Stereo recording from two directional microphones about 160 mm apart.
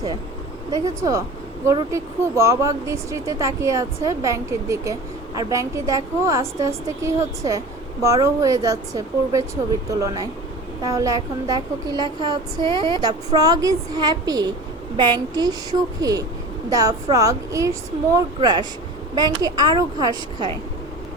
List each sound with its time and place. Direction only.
0.7 s speech: 20° right (ahead or behind)